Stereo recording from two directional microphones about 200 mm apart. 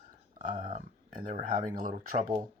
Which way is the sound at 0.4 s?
40° right (ahead or behind).